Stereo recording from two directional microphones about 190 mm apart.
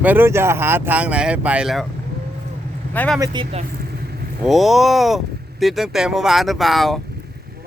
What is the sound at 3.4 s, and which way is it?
Speech, 25° right (ahead or behind).